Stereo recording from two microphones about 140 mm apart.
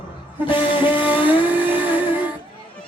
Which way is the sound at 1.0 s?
10° right (ahead or behind).